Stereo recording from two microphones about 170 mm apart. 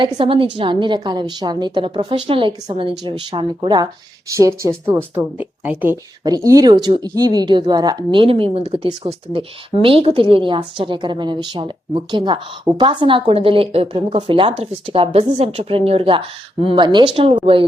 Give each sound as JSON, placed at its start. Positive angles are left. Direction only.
{"t": 0.0, "sound": "a woman's voice", "side_deg": -30}
{"t": 6.2, "sound": "a woman's voice", "side_deg": -20}